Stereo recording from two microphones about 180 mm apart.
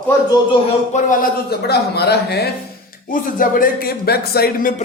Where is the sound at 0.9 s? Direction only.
50° left (ahead or behind); by 2.5 s 65° left (ahead or behind).